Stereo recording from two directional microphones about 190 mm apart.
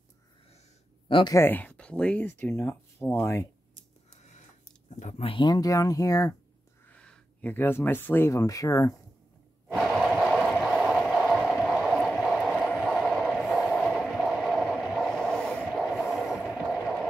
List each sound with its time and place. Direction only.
1.0 s speech: 25° left (ahead or behind)
4.8 s speech: 40° left (ahead or behind); by 6.3 s 20° left (ahead or behind)
6.9 s speech: 5° left (ahead or behind)
9.7 s a sound: centre (ahead or behind)